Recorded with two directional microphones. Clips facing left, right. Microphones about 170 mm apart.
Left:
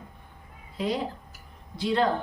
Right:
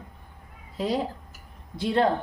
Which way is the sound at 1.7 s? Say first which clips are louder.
Right 2 dB; 50° right (ahead or behind).